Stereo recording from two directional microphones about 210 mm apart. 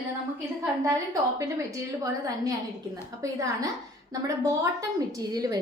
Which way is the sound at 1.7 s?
15° right (ahead or behind).